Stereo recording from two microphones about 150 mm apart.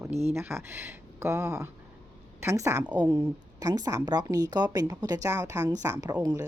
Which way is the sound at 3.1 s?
35° right (ahead or behind).